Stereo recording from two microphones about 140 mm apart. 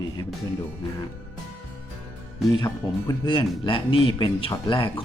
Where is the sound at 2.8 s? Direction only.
35° left (ahead or behind).